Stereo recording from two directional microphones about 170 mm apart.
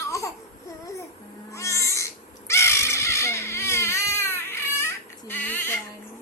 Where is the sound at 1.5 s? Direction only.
15° left (ahead or behind).